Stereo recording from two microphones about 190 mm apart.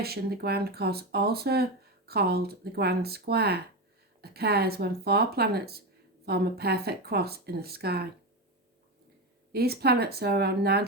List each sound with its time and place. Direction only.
0.0 s speech: 55° right (ahead or behind)
9.5 s speech: 55° right (ahead or behind)